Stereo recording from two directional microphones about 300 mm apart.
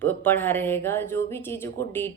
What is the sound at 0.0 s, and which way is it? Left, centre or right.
Speech, centre.